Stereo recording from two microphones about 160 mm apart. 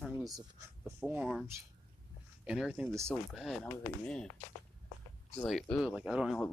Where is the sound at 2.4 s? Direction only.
5° right (ahead or behind).